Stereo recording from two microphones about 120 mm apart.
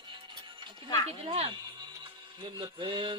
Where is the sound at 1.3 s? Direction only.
50° right (ahead or behind).